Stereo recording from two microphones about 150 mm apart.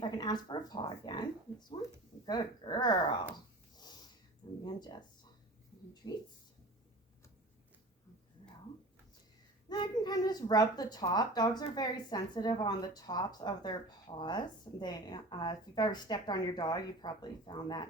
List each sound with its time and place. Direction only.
0.0 s a child's voice: 30° left (ahead or behind)
3.8 s snort: 25° left (ahead or behind)
4.6 s a child's voice: 30° left (ahead or behind)
9.6 s a child's voice: 30° left (ahead or behind)